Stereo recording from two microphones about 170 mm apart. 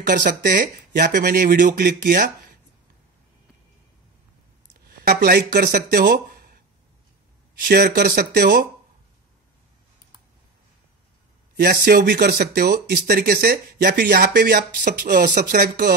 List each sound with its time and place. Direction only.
0.0 s speech: 50° right (ahead or behind)
4.8 s speech: 65° right (ahead or behind)
11.5 s speech: 65° right (ahead or behind)